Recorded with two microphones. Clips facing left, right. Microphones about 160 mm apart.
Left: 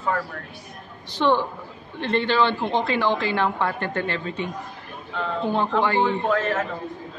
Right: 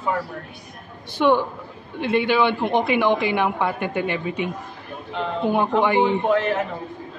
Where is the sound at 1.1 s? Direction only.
10° right (ahead or behind).